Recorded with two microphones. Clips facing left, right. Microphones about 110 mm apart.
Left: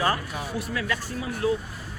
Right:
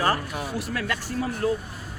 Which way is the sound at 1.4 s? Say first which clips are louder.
Left 1 dB; 10° left (ahead or behind).